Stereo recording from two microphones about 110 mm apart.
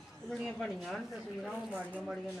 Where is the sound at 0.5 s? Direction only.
5° left (ahead or behind).